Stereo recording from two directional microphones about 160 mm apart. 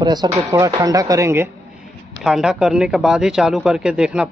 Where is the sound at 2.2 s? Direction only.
5° right (ahead or behind).